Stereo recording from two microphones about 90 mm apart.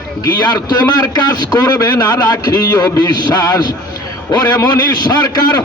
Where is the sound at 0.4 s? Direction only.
45° left (ahead or behind).